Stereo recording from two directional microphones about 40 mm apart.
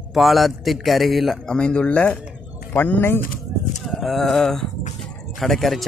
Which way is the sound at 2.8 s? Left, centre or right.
Left.